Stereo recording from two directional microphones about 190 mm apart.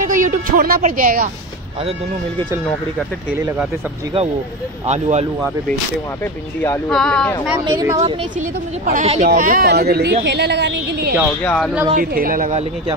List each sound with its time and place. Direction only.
0.1 s speech: 45° right (ahead or behind)
4.8 s a woman's voice: 35° right (ahead or behind)
6.9 s speech: 5° left (ahead or behind)
7.6 s speech: 20° right (ahead or behind)
8.4 s a woman's voice: 40° right (ahead or behind); by 11.1 s 60° right (ahead or behind)
11.4 s speech: centre (ahead or behind)
11.9 s a woman's voice: 45° right (ahead or behind)